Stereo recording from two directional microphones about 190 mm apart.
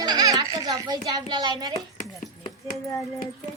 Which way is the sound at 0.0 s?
20° right (ahead or behind).